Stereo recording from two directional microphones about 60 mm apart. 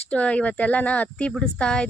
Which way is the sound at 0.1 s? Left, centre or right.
Left.